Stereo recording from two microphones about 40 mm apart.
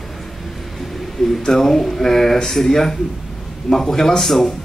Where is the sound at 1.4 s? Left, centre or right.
Centre.